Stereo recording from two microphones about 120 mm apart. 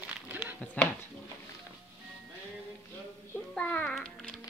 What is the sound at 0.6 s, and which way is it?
Speech, 10° left (ahead or behind).